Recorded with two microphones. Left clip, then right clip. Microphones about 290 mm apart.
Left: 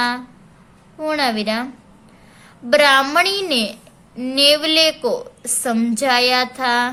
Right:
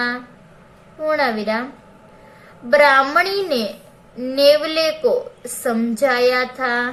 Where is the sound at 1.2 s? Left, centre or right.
Left.